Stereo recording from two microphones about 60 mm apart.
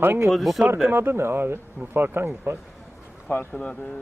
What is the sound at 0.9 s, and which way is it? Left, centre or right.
Speech, right.